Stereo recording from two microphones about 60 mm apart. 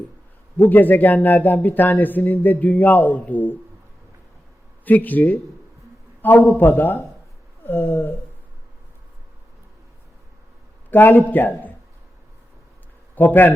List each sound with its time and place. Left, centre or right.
0.5 s a man's voice: left
4.9 s a man's voice: left
10.9 s a man's voice: left
13.1 s a man's voice: left